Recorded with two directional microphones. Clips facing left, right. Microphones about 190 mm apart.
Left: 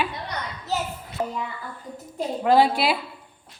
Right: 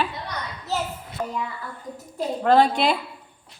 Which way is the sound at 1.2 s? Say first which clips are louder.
Left 2 dB; 30° left (ahead or behind).